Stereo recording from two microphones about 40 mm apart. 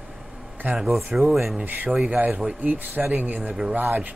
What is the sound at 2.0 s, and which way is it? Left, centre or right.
Speech, right.